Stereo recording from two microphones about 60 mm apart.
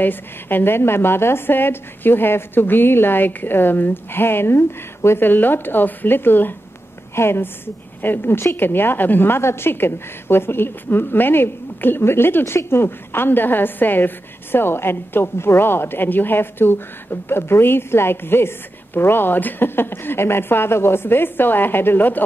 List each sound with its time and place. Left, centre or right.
0.0 s a woman's voice: left